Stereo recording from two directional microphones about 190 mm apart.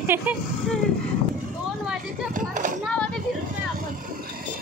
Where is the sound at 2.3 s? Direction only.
45° right (ahead or behind).